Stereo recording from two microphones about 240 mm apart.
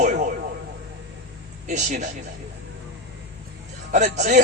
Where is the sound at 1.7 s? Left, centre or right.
Right.